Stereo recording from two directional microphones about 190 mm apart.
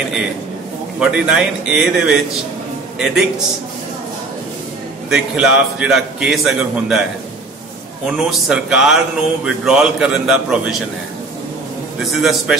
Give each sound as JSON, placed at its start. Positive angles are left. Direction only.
{"t": 0.9, "sound": "speech", "side_deg": -5}
{"t": 5.1, "sound": "speech", "side_deg": -5}
{"t": 8.1, "sound": "speech", "side_deg": -5}
{"t": 12.0, "sound": "speech", "side_deg": 0}